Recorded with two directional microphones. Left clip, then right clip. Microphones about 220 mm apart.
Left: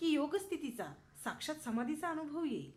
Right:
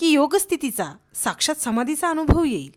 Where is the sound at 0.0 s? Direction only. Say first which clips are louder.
Right 17 dB; 50° right (ahead or behind).